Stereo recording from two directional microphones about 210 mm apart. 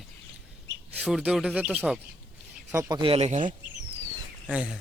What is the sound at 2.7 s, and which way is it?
Speech, 15° right (ahead or behind).